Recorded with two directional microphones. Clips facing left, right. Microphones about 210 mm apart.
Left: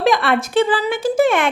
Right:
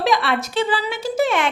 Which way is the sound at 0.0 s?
50° left (ahead or behind).